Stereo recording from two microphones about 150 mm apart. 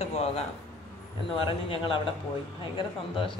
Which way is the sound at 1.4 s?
35° left (ahead or behind).